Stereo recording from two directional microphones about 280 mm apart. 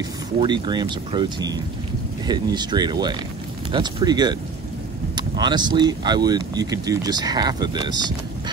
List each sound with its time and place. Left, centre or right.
0.4 s speech: centre